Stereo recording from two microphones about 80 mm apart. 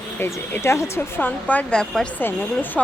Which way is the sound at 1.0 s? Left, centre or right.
Left.